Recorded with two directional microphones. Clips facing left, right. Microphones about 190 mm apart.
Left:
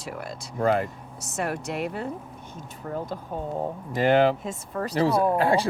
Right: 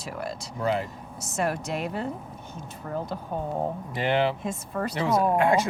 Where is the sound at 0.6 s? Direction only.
50° left (ahead or behind).